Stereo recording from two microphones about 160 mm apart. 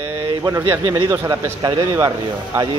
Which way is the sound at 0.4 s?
15° right (ahead or behind).